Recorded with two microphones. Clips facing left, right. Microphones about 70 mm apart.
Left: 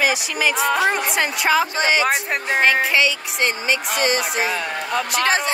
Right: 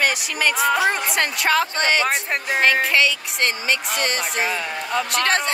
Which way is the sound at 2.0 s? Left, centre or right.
Left.